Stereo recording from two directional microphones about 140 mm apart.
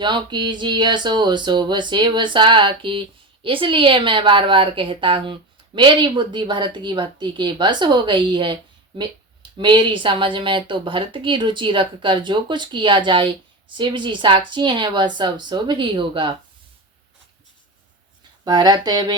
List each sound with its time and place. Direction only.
0.0 s speech: 35° right (ahead or behind)
18.4 s speech: 30° right (ahead or behind)